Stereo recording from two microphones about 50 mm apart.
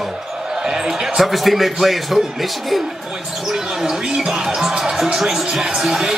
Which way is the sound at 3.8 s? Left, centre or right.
Centre.